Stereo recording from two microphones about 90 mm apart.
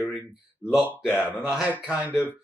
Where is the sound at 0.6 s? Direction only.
10° right (ahead or behind).